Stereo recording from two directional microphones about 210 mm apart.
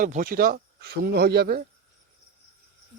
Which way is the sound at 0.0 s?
40° right (ahead or behind).